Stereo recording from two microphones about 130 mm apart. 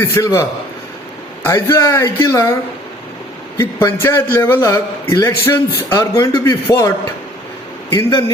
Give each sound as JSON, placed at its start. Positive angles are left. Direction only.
{"t": 0.0, "sound": "a man's voice", "side_deg": 20}
{"t": 1.5, "sound": "a man's voice", "side_deg": 20}
{"t": 3.6, "sound": "a man's voice", "side_deg": 20}
{"t": 7.9, "sound": "a man's voice", "side_deg": 35}